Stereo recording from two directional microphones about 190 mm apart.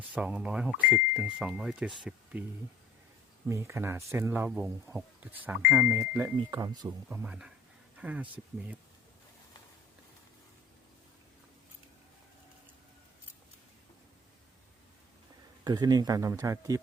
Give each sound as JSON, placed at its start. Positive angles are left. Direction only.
{"t": 0.1, "sound": "speech", "side_deg": -5}
{"t": 3.5, "sound": "speech", "side_deg": -15}
{"t": 7.1, "sound": "speech", "side_deg": -5}
{"t": 15.6, "sound": "speech", "side_deg": -20}